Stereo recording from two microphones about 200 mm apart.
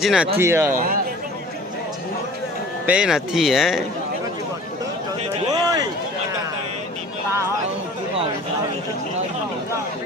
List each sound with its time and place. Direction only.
0.0 s speech: centre (ahead or behind)
0.3 s speech: 10° right (ahead or behind)
2.8 s speech: 5° right (ahead or behind)
5.5 s run: 15° right (ahead or behind)